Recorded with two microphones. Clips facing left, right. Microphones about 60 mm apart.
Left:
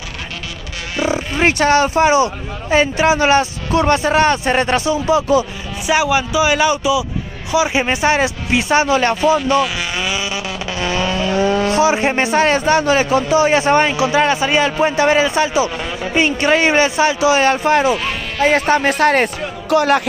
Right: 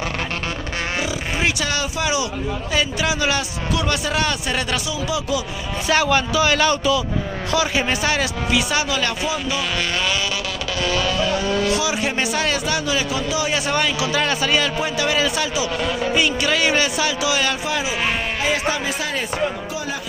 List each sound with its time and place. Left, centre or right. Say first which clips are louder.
1.4 s speech: left 11 dB; left
5.9 s a man's voice: left 3 dB; centre; by 9.6 s left
10.8 s speech: left 2 dB; left